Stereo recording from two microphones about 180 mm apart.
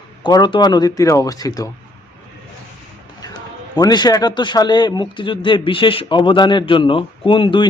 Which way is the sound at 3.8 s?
20° left (ahead or behind).